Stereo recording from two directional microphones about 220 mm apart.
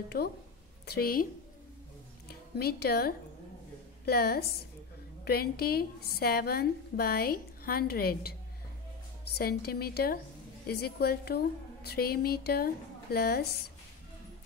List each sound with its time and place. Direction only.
0.1 s a woman's voice: 45° left (ahead or behind)
2.2 s a woman's voice: 45° left (ahead or behind)